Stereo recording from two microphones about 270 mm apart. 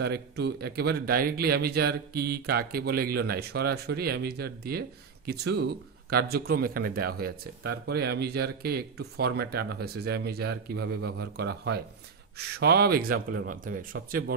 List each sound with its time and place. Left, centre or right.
0.0 s speech: right